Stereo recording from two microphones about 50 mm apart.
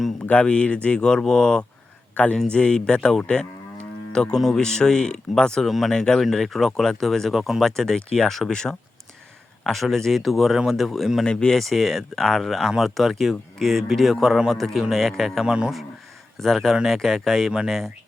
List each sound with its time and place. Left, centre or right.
0.4 s speech: left
2.1 s speech: left; by 5.6 s centre
5.6 s speech: centre
5.9 s speech: centre
9.6 s speech: centre
11.3 s speech: centre
11.5 s speech: centre
15.4 s speech: centre
16.4 s speech: centre